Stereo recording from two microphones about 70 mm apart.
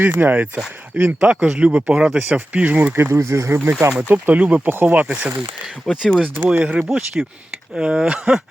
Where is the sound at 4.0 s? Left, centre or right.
Right.